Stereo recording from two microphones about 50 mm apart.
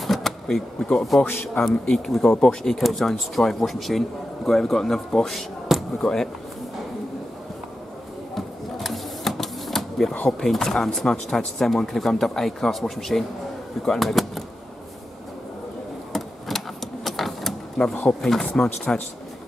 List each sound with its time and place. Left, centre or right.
0.0 s a sound: centre
1.2 s a man's voice: left
1.9 s speech: centre
8.4 s sewing machine: centre
10.4 s speech: centre
16.1 s a sound: centre
17.8 s speech: centre